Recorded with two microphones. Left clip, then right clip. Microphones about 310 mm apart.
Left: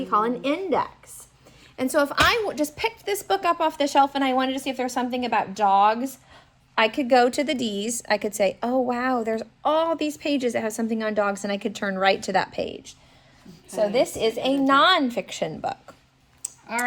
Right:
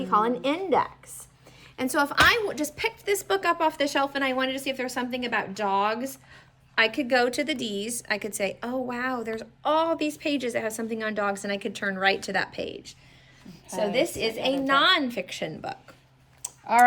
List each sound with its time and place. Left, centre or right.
0.0 s a woman's voice: centre
16.4 s clicking: centre